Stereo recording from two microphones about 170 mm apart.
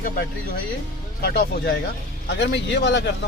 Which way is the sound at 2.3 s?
90° left.